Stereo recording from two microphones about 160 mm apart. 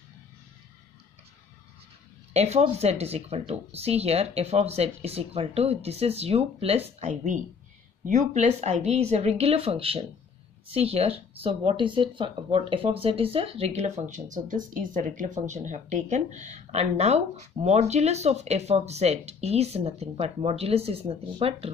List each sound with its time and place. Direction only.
2.3 s speech: 40° right (ahead or behind)